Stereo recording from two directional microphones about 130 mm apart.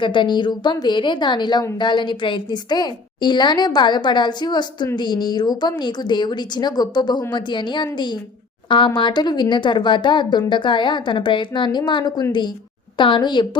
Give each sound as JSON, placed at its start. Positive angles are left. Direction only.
{"t": 0.0, "sound": "a woman's voice", "side_deg": 40}